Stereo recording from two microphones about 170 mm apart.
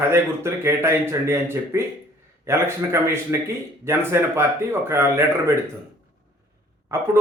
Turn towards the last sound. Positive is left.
turn(degrees=-15)  # may be behind; listen again after turning